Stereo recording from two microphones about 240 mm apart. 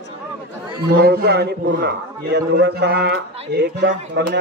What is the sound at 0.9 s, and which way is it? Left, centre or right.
A man's voice, right.